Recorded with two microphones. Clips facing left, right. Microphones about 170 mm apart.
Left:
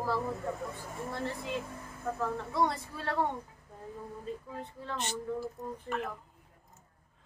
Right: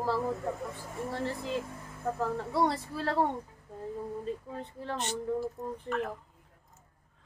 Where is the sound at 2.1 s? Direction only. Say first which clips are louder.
Right 1 dB; 35° right (ahead or behind).